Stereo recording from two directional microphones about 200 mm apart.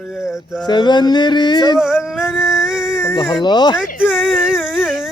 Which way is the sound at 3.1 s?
20° left (ahead or behind).